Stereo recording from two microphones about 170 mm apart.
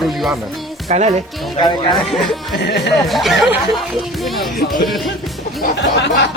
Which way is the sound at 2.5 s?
75° left (ahead or behind).